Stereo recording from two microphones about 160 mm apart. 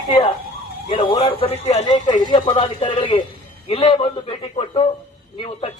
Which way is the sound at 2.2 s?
30° left (ahead or behind).